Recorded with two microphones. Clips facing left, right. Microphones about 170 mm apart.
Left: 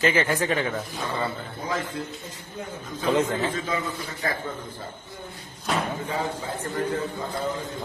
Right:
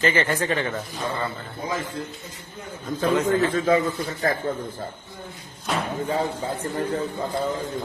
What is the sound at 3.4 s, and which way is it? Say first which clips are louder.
A man's voice: right 7 dB; 45° right (ahead or behind).